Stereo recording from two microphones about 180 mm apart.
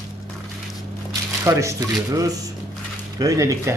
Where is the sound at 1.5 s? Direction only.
15° right (ahead or behind).